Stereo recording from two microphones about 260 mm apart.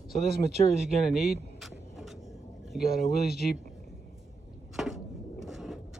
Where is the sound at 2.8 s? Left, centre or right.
Left.